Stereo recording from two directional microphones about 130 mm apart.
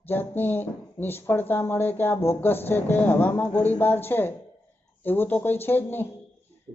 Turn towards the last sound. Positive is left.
turn(degrees=15)  # may be behind; listen again after turning